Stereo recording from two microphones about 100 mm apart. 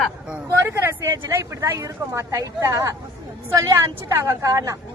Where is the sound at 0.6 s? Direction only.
25° right (ahead or behind).